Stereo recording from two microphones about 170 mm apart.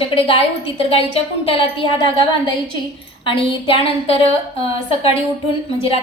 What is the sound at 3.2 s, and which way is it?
A woman's voice, 30° left (ahead or behind).